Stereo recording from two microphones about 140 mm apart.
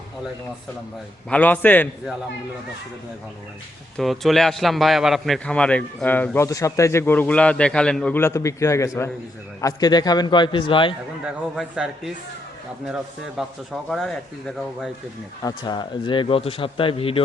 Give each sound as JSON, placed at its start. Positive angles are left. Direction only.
{"t": 1.3, "sound": "a man's voice", "side_deg": 10}
{"t": 3.9, "sound": "a man's voice", "side_deg": 0}
{"t": 11.3, "sound": "speech", "side_deg": -5}
{"t": 13.9, "sound": "speech", "side_deg": 5}
{"t": 15.4, "sound": "speech", "side_deg": 30}